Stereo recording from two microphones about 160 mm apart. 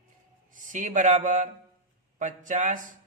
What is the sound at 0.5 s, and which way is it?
A man's voice, 55° right (ahead or behind).